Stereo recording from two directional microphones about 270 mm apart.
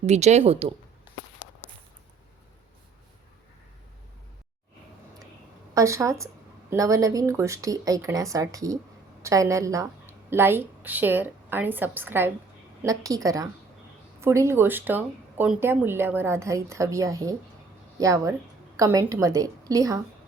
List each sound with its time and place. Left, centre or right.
0.0 s speech: right
5.7 s a woman's voice: centre